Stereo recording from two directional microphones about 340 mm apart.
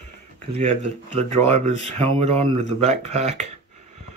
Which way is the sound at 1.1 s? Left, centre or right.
Centre.